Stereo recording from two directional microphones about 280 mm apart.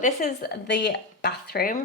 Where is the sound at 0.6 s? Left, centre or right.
Left.